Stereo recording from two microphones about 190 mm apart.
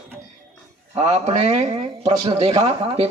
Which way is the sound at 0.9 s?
35° right (ahead or behind).